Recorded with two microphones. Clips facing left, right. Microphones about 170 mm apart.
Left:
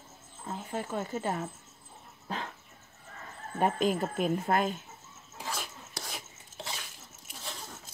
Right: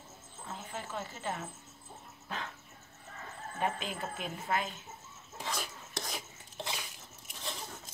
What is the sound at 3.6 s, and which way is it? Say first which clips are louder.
Speech: left 8 dB; 45° left (ahead or behind).